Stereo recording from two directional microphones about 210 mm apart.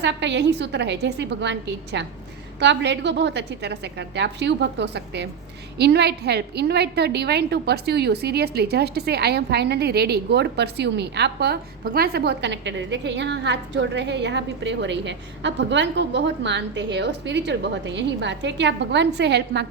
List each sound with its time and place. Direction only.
0.0 s a woman's voice: 55° right (ahead or behind)